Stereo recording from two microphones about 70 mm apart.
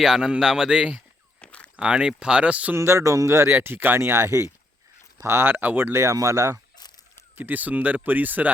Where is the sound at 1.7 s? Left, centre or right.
Centre.